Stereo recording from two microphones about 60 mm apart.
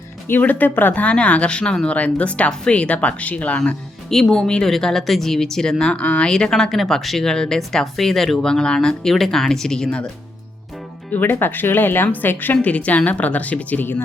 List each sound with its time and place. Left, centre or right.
0.3 s speech: left
4.1 s speech: centre
5.8 s speech: centre
11.1 s speech: left
12.6 s speech: left